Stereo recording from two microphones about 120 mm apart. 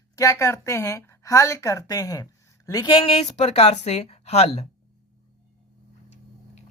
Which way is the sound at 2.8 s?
45° left (ahead or behind).